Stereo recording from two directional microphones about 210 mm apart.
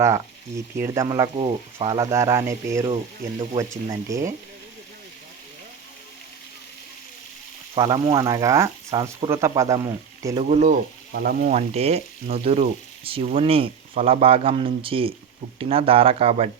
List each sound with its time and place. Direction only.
0.8 s speech: 15° right (ahead or behind)
7.8 s speech: 20° right (ahead or behind)
10.5 s frying: 40° right (ahead or behind)
11.5 s speech: 30° right (ahead or behind)